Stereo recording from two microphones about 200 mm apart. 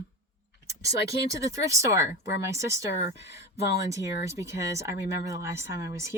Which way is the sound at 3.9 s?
15° right (ahead or behind).